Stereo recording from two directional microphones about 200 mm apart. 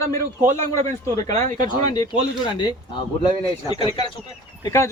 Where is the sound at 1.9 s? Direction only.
20° left (ahead or behind).